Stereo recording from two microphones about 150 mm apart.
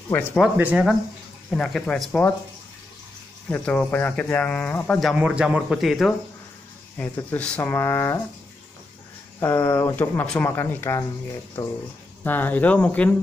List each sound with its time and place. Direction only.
0.4 s speech: 10° right (ahead or behind)
1.5 s a man's voice: 5° left (ahead or behind)
3.4 s speech: 10° left (ahead or behind)
5.0 s a man's voice: 5° right (ahead or behind)
7.0 s speech: 10° left (ahead or behind)
9.4 s speech: 15° left (ahead or behind)
12.2 s speech: 10° left (ahead or behind)